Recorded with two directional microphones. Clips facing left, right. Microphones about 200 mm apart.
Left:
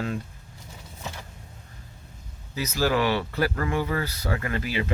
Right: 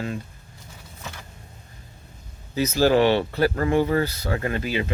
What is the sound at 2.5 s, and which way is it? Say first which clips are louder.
Speech: right 6 dB; 25° right (ahead or behind).